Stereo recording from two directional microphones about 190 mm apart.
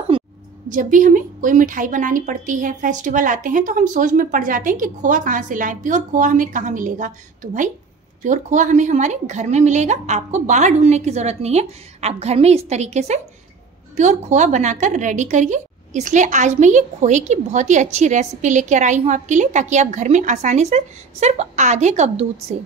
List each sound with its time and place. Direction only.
0.1 s a sound: 25° right (ahead or behind)
0.7 s speech: 45° right (ahead or behind)
8.2 s a woman's voice: 40° right (ahead or behind)